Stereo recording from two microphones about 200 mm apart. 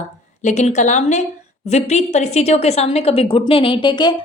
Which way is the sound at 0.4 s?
35° left (ahead or behind).